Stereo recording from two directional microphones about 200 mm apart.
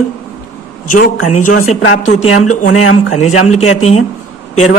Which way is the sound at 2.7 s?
90° left.